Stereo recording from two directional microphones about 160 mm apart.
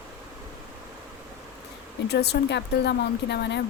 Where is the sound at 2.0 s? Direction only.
90° left.